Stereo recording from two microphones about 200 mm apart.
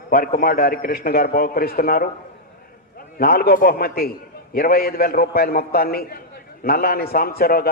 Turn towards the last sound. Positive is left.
turn(degrees=50)  # may be behind; listen again after turning